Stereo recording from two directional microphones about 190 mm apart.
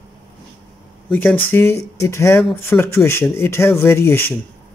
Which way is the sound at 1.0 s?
10° left (ahead or behind).